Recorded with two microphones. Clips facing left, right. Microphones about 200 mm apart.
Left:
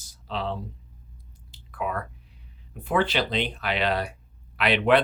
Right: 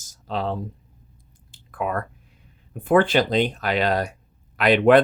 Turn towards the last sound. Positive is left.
turn(degrees=-45)  # may be behind; listen again after turning